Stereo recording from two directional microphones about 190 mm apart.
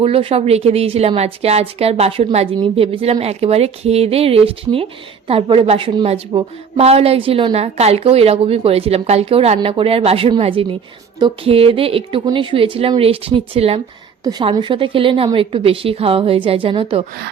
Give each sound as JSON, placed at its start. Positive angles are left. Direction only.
{"t": 0.0, "sound": "a woman's voice", "side_deg": -30}